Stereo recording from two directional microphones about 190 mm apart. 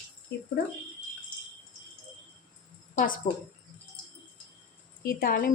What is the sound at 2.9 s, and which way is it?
Speech, 45° left (ahead or behind).